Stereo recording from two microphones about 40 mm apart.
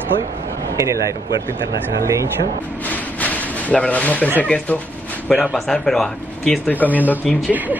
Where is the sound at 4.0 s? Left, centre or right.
Left.